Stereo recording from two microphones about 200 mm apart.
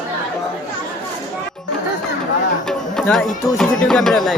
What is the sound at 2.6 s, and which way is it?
Speech, 5° left (ahead or behind).